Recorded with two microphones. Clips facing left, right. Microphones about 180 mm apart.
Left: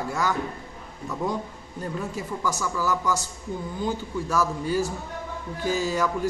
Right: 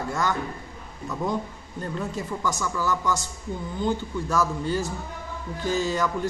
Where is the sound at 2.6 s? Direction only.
5° left (ahead or behind).